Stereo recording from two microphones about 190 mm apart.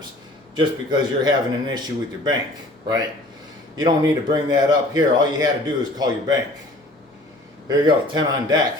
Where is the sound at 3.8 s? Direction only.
20° right (ahead or behind).